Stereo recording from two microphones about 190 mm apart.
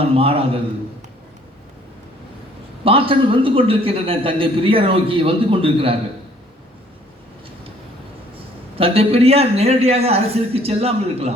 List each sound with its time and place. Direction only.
0.0 s a man's voice: 30° right (ahead or behind)
2.8 s a man's voice: 30° right (ahead or behind)
8.8 s a man's voice: 30° right (ahead or behind)